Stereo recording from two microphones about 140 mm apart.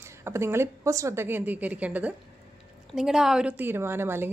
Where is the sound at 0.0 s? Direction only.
20° right (ahead or behind).